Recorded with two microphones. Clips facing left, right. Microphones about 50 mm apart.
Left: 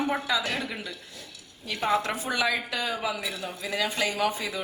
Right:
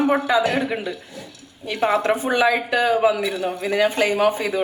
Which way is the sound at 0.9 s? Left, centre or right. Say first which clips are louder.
Right 9 dB; centre.